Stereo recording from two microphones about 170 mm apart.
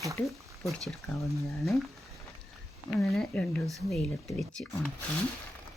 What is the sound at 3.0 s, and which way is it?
Speech, centre (ahead or behind).